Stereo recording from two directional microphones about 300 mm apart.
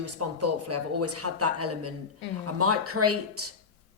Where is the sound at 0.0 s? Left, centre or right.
Right.